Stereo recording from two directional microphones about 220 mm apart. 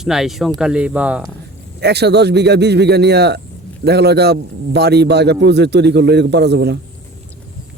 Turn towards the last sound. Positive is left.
turn(degrees=-50)  # may be behind; listen again after turning